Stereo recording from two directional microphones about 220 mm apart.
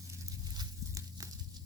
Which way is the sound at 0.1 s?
15° right (ahead or behind).